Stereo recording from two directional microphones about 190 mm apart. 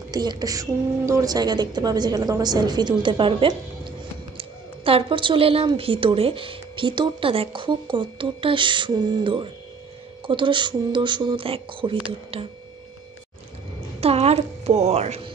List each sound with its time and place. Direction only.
0.1 s a woman's voice: 20° right (ahead or behind)
14.0 s a woman's voice: 35° right (ahead or behind)